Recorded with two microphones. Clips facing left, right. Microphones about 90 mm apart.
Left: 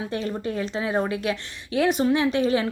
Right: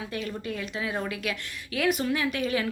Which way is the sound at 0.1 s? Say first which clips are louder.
Left 5 dB; 30° left (ahead or behind).